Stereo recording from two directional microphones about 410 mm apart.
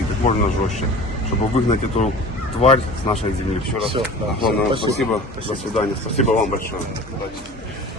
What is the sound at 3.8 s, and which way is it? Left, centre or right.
Speech, centre.